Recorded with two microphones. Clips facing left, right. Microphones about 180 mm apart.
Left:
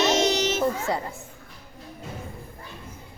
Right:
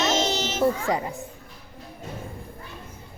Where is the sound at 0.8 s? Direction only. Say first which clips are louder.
Right 2 dB; 15° right (ahead or behind).